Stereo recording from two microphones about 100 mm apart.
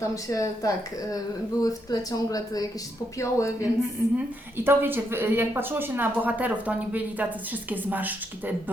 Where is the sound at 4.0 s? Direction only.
15° right (ahead or behind).